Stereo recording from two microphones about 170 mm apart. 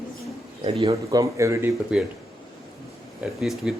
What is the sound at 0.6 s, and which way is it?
Speech, 35° right (ahead or behind).